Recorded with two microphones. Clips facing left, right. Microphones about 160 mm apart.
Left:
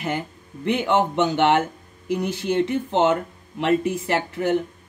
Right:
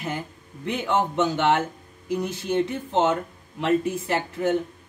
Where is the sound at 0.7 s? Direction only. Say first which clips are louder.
Left 4 dB; 70° left (ahead or behind).